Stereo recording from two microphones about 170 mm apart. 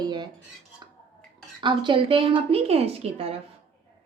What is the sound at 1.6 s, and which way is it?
A woman's voice, 30° right (ahead or behind).